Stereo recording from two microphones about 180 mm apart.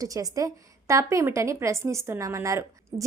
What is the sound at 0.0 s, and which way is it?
A woman's voice, 20° right (ahead or behind).